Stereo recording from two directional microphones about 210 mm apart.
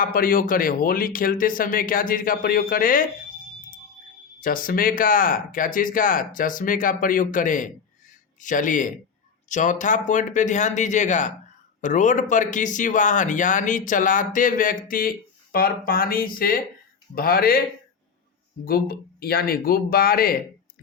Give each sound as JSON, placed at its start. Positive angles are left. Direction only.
{"t": 0.0, "sound": "speech", "side_deg": 40}
{"t": 4.4, "sound": "speech", "side_deg": 40}
{"t": 18.6, "sound": "speech", "side_deg": 45}